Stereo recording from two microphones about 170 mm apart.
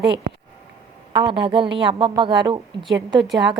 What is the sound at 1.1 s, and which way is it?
A woman's voice, 30° right (ahead or behind).